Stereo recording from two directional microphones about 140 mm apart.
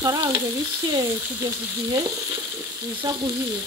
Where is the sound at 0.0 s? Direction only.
25° right (ahead or behind).